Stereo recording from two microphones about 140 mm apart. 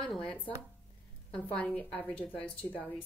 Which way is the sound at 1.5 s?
10° left (ahead or behind).